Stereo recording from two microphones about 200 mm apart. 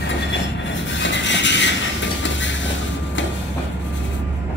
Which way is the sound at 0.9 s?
65° left (ahead or behind).